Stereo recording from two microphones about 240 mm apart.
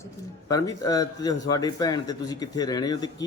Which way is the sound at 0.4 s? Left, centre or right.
Centre.